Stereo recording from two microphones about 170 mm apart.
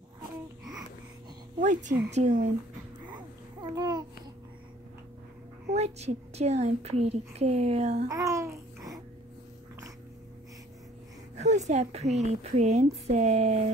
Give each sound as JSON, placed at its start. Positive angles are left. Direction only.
{"t": 1.6, "sound": "a woman's voice", "side_deg": -45}
{"t": 3.7, "sound": "babbling", "side_deg": -25}
{"t": 5.8, "sound": "a child's voice", "side_deg": -40}
{"t": 8.1, "sound": "a child's voice", "side_deg": -20}
{"t": 11.3, "sound": "a child's voice", "side_deg": -40}